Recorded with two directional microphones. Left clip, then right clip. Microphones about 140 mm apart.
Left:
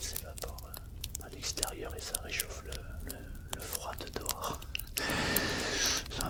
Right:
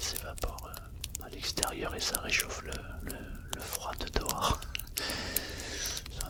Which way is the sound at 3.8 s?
15° right (ahead or behind).